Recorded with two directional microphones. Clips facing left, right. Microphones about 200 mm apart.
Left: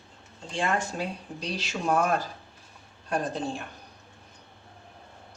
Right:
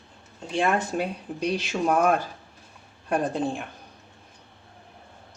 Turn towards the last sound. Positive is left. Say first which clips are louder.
# right 4 dB
turn(degrees=-55)  # may be behind; listen again after turning